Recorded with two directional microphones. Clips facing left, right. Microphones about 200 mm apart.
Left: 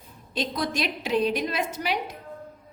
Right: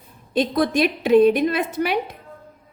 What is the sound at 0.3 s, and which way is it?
A woman's voice, 55° right (ahead or behind).